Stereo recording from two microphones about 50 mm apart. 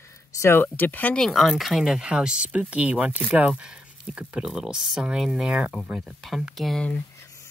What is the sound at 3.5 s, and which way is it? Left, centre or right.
Speech, centre.